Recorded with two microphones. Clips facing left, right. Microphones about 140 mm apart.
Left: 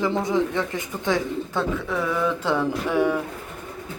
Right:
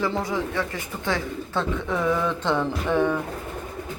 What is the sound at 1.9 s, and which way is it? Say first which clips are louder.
Speech: right 2 dB; centre (ahead or behind).